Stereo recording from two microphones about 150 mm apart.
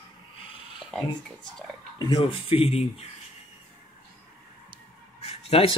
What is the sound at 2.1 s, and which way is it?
Speech, 40° left (ahead or behind).